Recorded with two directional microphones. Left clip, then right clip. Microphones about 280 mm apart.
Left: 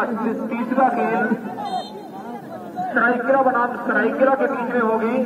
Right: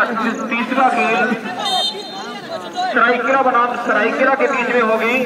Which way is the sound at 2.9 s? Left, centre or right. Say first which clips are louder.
Right 3 dB; right.